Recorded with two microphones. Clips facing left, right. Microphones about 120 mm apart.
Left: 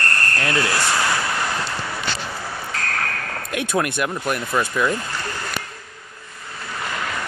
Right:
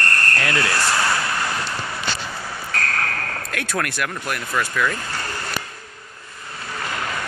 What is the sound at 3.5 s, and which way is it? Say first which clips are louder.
Speech: left 5 dB; 20° left (ahead or behind).